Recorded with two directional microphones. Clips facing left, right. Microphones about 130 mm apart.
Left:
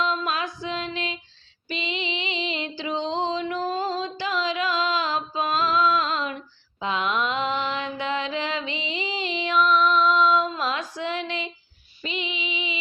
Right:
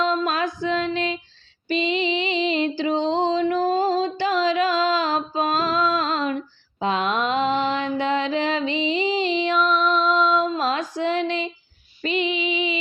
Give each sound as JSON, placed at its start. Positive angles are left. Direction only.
{"t": 0.0, "sound": "music", "side_deg": -40}
{"t": 12.0, "sound": "female singing", "side_deg": -50}